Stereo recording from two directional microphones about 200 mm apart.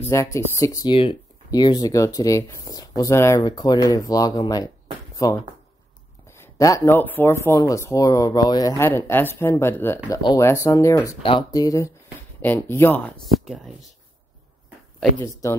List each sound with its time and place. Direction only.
0.0 s speech: 15° left (ahead or behind)
15.4 s speech: 15° left (ahead or behind)